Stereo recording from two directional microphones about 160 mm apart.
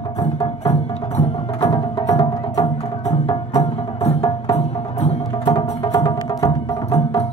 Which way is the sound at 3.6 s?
40° left (ahead or behind).